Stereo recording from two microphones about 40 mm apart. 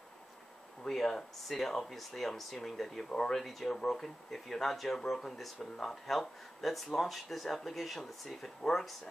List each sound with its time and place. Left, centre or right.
0.8 s speech: centre
3.4 s speech: centre